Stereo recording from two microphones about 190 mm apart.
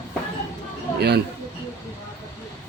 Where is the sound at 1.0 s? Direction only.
60° right (ahead or behind).